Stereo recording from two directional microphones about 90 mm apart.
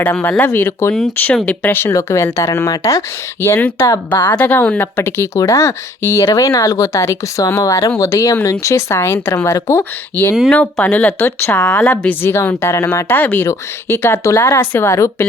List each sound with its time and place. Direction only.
0.0 s speech: 20° left (ahead or behind)
10.1 s speech: 20° left (ahead or behind)
11.2 s speech: 30° left (ahead or behind)
11.5 s speech: 10° left (ahead or behind); by 15.3 s 30° left (ahead or behind)